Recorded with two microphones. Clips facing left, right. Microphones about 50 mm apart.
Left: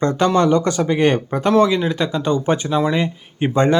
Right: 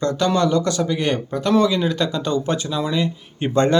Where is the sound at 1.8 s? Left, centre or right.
Centre.